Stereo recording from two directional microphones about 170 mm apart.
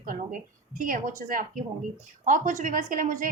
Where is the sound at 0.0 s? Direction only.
55° right (ahead or behind).